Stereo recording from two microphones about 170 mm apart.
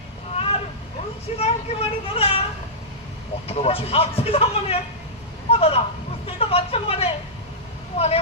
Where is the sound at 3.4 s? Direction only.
35° left (ahead or behind).